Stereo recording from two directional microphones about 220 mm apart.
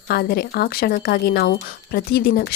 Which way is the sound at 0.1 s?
45° left (ahead or behind).